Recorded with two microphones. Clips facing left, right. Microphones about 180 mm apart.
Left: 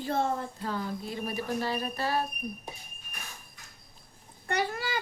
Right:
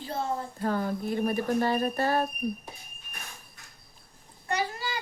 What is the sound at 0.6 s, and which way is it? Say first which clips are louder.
Speech: right 5 dB; 50° right (ahead or behind).